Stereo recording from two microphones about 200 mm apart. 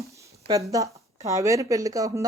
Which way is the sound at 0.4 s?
15° right (ahead or behind).